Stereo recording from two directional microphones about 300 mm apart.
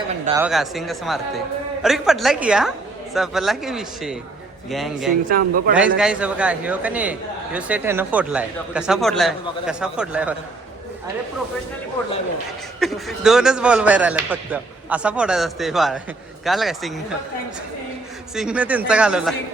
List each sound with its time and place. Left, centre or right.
0.3 s a man's voice: centre
5.3 s speech: right
5.7 s a man's voice: centre
12.8 s a man's voice: centre
18.3 s a man's voice: centre